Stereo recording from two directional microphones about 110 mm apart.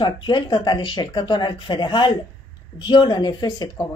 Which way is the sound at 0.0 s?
45° left (ahead or behind).